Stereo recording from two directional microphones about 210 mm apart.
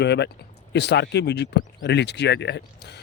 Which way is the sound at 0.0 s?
55° left (ahead or behind).